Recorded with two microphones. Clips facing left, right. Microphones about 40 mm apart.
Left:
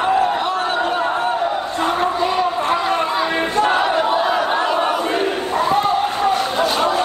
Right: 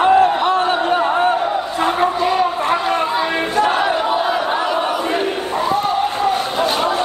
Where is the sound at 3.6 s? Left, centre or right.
Centre.